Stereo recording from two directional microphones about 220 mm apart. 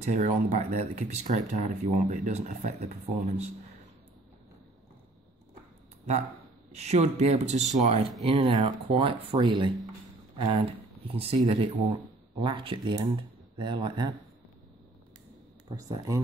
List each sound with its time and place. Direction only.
0.0 s speech: 30° right (ahead or behind)
6.7 s speech: 30° right (ahead or behind)
15.7 s speech: 15° right (ahead or behind)